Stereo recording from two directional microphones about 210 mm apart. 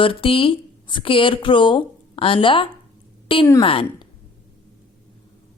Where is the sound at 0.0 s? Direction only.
25° left (ahead or behind).